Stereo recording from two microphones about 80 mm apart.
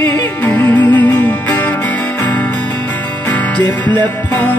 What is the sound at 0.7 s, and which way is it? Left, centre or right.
Music, left.